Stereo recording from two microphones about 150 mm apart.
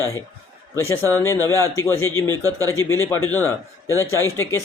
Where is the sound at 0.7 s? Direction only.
15° left (ahead or behind).